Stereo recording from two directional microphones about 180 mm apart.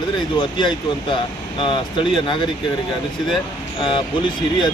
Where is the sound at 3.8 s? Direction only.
25° left (ahead or behind).